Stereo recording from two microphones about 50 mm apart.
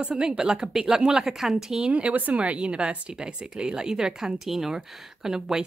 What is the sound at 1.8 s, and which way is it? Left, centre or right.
Speech, right.